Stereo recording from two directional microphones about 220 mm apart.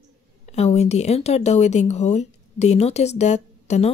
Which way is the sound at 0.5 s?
30° left (ahead or behind).